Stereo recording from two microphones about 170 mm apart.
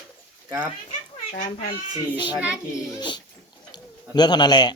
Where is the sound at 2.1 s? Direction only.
25° left (ahead or behind).